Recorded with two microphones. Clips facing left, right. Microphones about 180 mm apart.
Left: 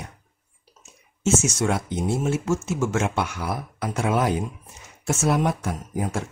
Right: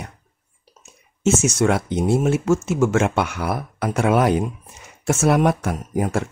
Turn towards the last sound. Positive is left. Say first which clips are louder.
# right 5 dB
turn(degrees=-65)  # may be behind; listen again after turning